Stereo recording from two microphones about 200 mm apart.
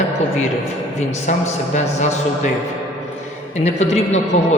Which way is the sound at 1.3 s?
40° left (ahead or behind).